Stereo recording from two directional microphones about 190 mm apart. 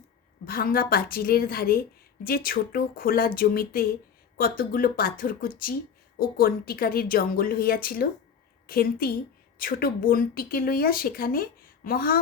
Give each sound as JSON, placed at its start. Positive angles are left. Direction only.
{"t": 0.4, "sound": "a woman's voice", "side_deg": 50}